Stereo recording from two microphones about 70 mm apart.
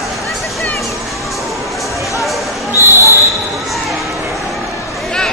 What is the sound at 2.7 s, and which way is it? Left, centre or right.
Basketball bounce, right.